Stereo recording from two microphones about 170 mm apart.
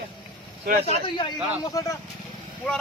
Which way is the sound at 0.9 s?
30° left (ahead or behind).